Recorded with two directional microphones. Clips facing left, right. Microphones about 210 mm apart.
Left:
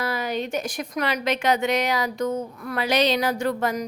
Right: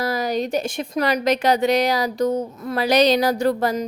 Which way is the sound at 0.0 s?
40° right (ahead or behind).